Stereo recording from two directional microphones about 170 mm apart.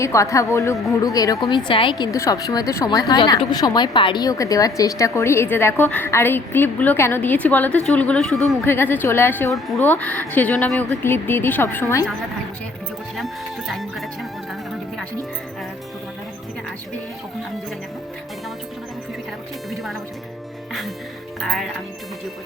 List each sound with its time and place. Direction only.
0.0 s a woman's voice: 15° left (ahead or behind)
2.1 s a woman's voice: 20° left (ahead or behind)
13.1 s music: centre (ahead or behind)
19.7 s music: centre (ahead or behind)